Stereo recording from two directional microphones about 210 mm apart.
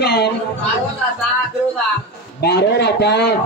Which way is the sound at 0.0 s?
55° left (ahead or behind).